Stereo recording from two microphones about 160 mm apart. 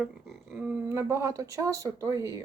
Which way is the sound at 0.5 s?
5° right (ahead or behind).